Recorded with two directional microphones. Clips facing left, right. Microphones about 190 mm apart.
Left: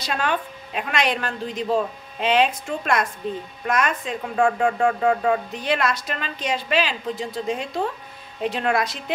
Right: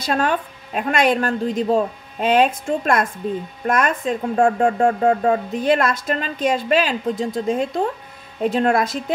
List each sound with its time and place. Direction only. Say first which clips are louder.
0.0 s speech: right 4 dB; 45° right (ahead or behind)
4.4 s speech: right 2 dB; 35° right (ahead or behind); by 9.0 s 50° right (ahead or behind)